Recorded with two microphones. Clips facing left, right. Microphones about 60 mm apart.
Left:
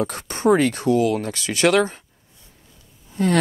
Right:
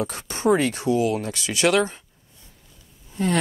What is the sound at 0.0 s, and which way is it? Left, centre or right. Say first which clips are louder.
Speech: left 3 dB; left.